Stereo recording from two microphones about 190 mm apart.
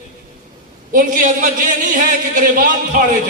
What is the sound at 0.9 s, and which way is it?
A man's voice, 45° right (ahead or behind).